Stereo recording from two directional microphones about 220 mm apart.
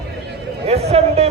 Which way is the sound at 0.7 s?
30° right (ahead or behind).